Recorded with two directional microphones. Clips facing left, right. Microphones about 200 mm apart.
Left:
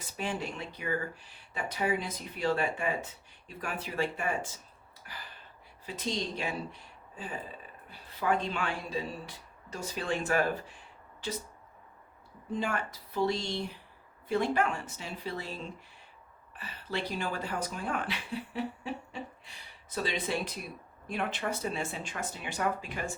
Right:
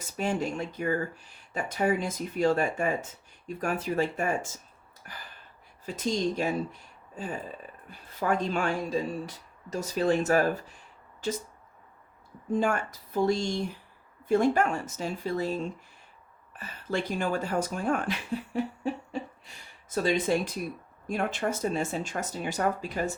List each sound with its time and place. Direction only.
0.2 s speech: 45° right (ahead or behind)
7.9 s speech: 45° right (ahead or behind)
12.5 s speech: 45° right (ahead or behind)
18.5 s laughter: 45° right (ahead or behind)
19.9 s speech: 45° right (ahead or behind)